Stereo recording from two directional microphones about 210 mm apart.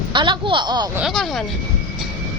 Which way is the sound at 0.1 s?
20° right (ahead or behind).